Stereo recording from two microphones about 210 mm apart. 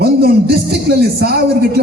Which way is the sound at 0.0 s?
50° right (ahead or behind).